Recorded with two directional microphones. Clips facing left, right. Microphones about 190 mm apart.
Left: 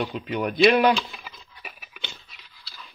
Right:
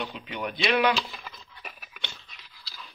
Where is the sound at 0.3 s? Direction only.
45° left (ahead or behind).